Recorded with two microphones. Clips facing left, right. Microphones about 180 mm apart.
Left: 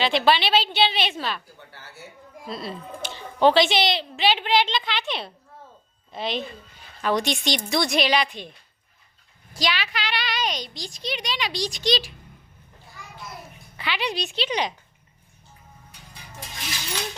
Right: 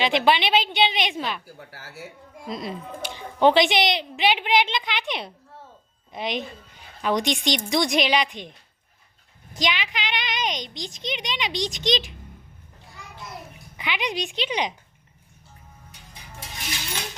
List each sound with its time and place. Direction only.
0.0 s speech: 20° right (ahead or behind)
1.5 s speech: 90° right
2.5 s a woman's voice: 15° right (ahead or behind)
13.7 s speech: 15° right (ahead or behind)